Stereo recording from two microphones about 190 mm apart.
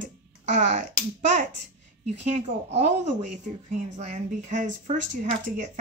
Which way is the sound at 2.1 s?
35° right (ahead or behind).